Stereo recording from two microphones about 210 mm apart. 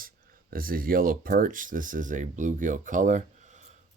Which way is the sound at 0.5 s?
40° right (ahead or behind).